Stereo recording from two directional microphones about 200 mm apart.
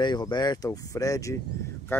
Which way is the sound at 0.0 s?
20° left (ahead or behind).